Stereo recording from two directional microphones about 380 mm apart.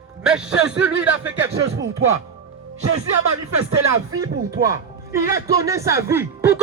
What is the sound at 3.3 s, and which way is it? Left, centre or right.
Speech, right.